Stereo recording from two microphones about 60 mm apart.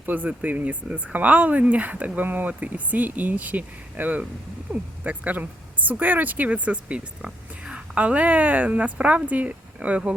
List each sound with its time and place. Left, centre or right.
0.0 s a woman's voice: right